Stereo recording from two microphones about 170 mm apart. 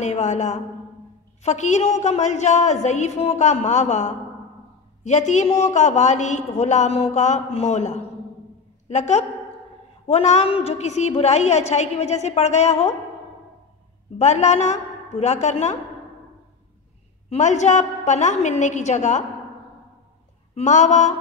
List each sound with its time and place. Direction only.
0.0 s a man's voice: 45° left (ahead or behind)
14.1 s a woman's voice: 40° left (ahead or behind)
17.3 s a man's voice: 45° left (ahead or behind)
20.5 s a man's voice: 45° left (ahead or behind)